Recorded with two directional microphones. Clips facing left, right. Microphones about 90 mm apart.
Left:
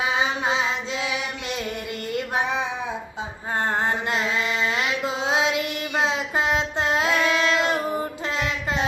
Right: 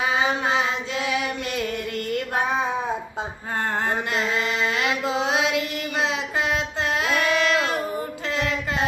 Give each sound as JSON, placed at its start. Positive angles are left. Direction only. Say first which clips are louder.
{"t": 2.0, "sound": "female singing", "louder": "left 1 dB", "side_deg": 20}
{"t": 4.1, "sound": "mantra", "louder": "even", "side_deg": 20}
{"t": 6.0, "sound": "child singing", "louder": "left 1 dB", "side_deg": 25}